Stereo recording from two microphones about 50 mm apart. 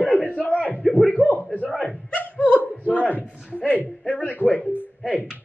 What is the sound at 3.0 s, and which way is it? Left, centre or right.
Speech, left.